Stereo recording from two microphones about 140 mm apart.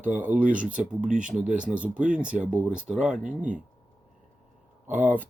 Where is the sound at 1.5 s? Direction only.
10° right (ahead or behind).